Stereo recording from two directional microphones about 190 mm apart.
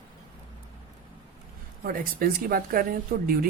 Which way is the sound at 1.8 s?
50° right (ahead or behind).